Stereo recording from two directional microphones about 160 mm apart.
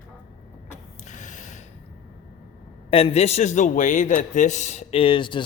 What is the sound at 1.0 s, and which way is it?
Snort, 50° left (ahead or behind).